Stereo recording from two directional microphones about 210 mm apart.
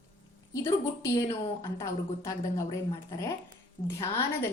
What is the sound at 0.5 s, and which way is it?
A woman's voice, 15° left (ahead or behind).